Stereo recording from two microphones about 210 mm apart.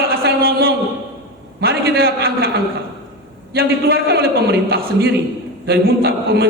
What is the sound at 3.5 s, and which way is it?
A man's voice, 45° right (ahead or behind).